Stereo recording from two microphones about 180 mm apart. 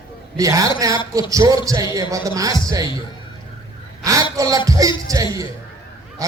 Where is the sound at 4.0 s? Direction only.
20° right (ahead or behind).